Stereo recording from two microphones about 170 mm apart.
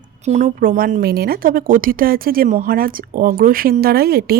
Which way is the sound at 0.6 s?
55° right (ahead or behind).